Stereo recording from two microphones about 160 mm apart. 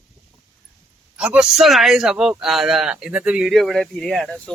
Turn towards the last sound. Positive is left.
turn(degrees=5)  # may be behind; listen again after turning